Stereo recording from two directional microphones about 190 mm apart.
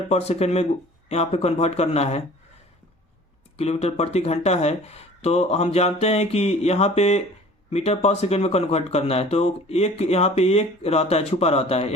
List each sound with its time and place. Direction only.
0.1 s speech: 35° left (ahead or behind)
3.6 s speech: 35° left (ahead or behind)